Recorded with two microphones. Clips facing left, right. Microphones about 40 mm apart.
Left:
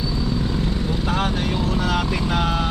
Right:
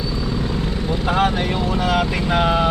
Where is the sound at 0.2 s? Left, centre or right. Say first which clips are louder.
Even; centre.